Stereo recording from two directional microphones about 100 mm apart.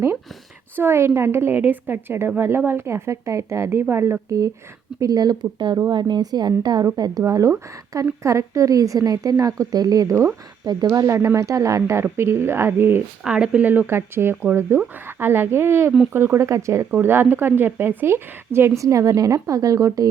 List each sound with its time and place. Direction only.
0.8 s a woman's voice: 25° right (ahead or behind)
13.2 s a woman's voice: 10° right (ahead or behind); by 20.1 s 35° right (ahead or behind)